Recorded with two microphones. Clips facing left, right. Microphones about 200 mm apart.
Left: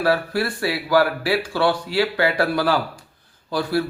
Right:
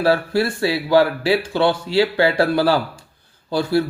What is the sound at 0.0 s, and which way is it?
Speech, 25° right (ahead or behind).